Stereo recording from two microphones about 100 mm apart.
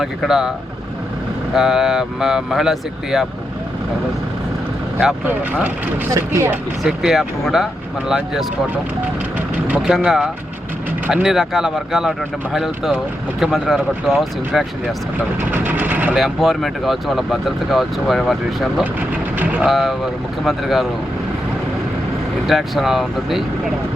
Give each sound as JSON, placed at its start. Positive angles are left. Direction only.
{"t": 0.0, "sound": "speech", "side_deg": -5}
{"t": 1.5, "sound": "speech", "side_deg": -5}
{"t": 5.2, "sound": "speech", "side_deg": -15}
{"t": 6.1, "sound": "speech", "side_deg": -25}
{"t": 6.8, "sound": "speech", "side_deg": -5}
{"t": 9.6, "sound": "speech", "side_deg": -10}
{"t": 15.5, "sound": "speech", "side_deg": -15}
{"t": 16.1, "sound": "speech", "side_deg": 0}
{"t": 19.4, "sound": "speech", "side_deg": -15}
{"t": 19.6, "sound": "speech", "side_deg": -5}
{"t": 22.4, "sound": "speech", "side_deg": 0}